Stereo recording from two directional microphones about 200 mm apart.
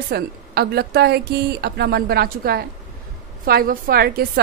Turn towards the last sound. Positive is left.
turn(degrees=-50)  # may be behind; listen again after turning